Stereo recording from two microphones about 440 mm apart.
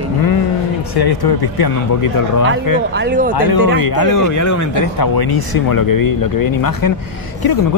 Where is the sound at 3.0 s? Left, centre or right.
Right.